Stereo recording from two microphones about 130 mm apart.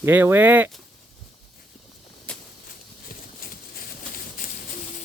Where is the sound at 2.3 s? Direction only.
10° left (ahead or behind).